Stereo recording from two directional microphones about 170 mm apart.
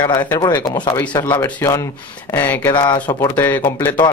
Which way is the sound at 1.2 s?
10° left (ahead or behind).